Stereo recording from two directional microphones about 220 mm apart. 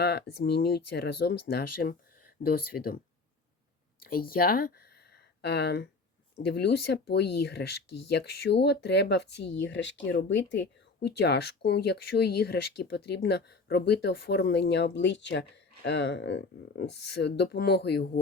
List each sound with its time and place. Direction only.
0.0 s speech: 50° left (ahead or behind)
4.0 s speech: 40° left (ahead or behind)